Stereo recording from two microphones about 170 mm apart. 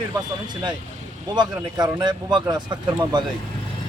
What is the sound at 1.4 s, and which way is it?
Speech, 25° right (ahead or behind).